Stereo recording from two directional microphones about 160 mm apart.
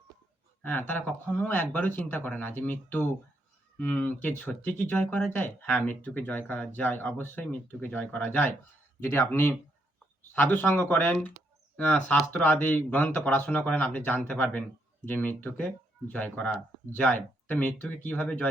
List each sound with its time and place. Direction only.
0.6 s speech: 10° left (ahead or behind)